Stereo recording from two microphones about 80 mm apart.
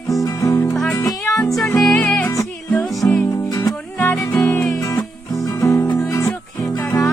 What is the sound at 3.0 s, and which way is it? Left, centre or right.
Music, left.